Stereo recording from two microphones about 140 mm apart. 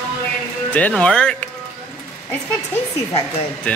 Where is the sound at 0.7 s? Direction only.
10° left (ahead or behind).